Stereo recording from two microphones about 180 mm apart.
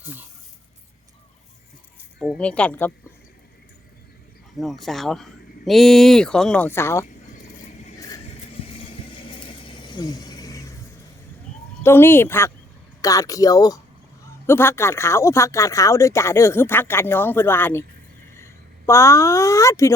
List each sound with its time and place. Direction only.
0.0 s speech: 10° right (ahead or behind)
2.1 s speech: 5° right (ahead or behind)
2.4 s speech: 5° left (ahead or behind)
4.5 s speech: centre (ahead or behind)
8.6 s vehicle: 30° left (ahead or behind)
9.3 s a sound: 30° left (ahead or behind)
11.8 s speech: 10° left (ahead or behind)